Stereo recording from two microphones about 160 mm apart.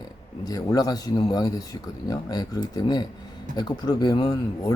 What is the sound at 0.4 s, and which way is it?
Speech, 25° left (ahead or behind).